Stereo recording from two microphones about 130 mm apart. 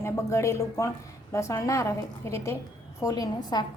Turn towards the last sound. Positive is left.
turn(degrees=30)  # may be behind; listen again after turning